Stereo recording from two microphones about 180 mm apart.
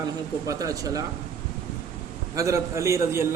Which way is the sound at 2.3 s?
15° right (ahead or behind).